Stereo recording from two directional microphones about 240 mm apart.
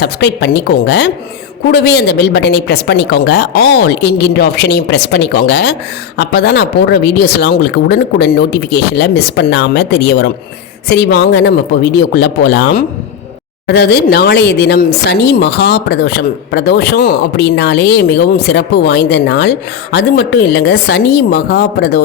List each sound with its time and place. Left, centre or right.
0.0 s speech: left